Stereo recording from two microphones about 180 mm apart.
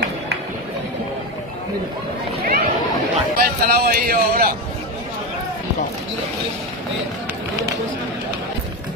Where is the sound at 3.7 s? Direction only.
55° right (ahead or behind).